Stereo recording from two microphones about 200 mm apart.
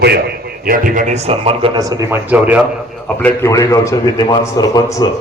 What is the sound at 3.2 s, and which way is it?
A man's voice, 10° left (ahead or behind).